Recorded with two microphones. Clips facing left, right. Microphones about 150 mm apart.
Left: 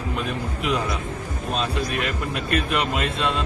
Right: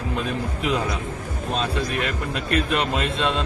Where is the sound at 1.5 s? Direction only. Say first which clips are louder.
Even; 30° right (ahead or behind).